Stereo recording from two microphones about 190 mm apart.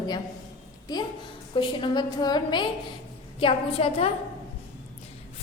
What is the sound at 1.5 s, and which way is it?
A woman's voice, 25° left (ahead or behind).